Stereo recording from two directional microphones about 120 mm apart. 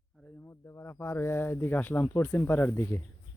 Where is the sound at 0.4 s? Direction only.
20° left (ahead or behind).